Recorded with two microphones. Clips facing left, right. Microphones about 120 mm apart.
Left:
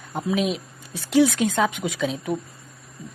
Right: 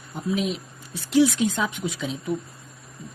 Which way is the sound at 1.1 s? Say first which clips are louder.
Left 1 dB; 55° left (ahead or behind).